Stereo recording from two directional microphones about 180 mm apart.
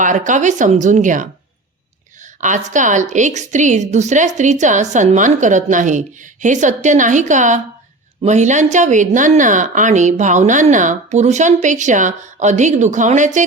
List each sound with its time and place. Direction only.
0.0 s a woman's voice: 45° right (ahead or behind)